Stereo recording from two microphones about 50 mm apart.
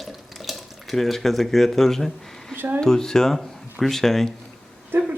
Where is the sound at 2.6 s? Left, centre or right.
Right.